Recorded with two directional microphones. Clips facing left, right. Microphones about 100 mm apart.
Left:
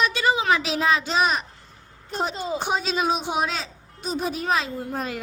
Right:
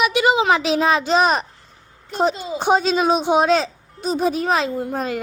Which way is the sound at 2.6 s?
30° right (ahead or behind).